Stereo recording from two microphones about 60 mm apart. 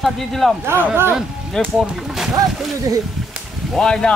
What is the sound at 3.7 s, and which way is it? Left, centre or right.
Speech, centre.